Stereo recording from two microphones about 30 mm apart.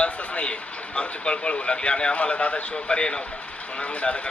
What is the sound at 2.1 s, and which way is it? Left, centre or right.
Speech, left.